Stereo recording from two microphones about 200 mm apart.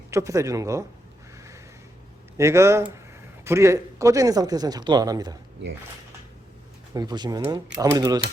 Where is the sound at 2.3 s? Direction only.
15° right (ahead or behind).